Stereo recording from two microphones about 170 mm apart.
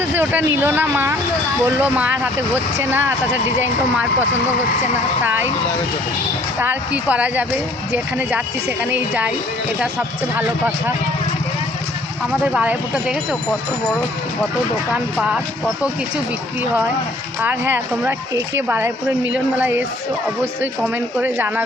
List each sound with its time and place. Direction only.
0.0 s speech: 10° right (ahead or behind)
5.2 s speech: 15° right (ahead or behind)
6.6 s speech: 10° right (ahead or behind)
8.8 s speech: 10° right (ahead or behind)
12.4 s speech: 5° right (ahead or behind)
14.9 s speech: 5° right (ahead or behind)
17.4 s speech: 10° right (ahead or behind)